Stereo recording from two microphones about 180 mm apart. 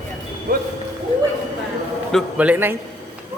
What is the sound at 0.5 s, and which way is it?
Speech, 50° right (ahead or behind).